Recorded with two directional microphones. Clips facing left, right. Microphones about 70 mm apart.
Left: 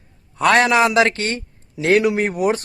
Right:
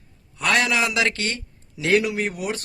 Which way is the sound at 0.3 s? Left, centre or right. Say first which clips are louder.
Left 7 dB; left.